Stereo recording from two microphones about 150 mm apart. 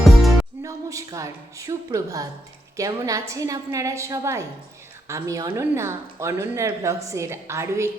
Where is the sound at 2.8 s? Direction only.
25° right (ahead or behind).